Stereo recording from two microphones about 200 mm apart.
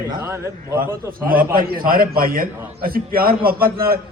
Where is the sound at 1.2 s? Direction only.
45° right (ahead or behind).